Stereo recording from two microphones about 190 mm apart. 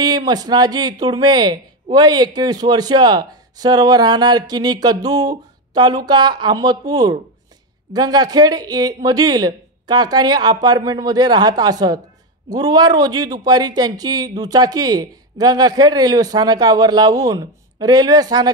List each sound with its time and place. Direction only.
0.0 s speech: 20° right (ahead or behind)